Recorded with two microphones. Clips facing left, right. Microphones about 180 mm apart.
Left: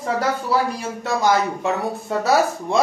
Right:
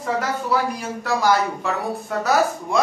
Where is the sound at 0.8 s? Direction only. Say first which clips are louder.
Left 1 dB; 20° left (ahead or behind).